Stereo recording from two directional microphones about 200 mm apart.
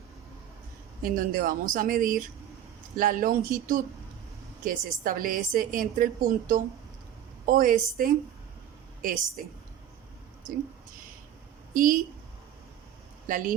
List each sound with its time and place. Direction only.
1.0 s a woman's voice: 45° right (ahead or behind)
11.7 s a woman's voice: 40° right (ahead or behind)
13.2 s speech: 40° right (ahead or behind)